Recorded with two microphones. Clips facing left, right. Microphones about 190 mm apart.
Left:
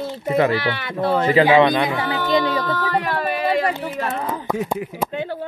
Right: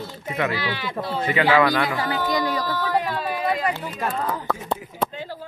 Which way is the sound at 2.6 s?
70° left (ahead or behind).